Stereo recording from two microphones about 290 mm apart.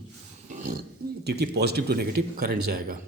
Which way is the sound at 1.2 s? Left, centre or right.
Right.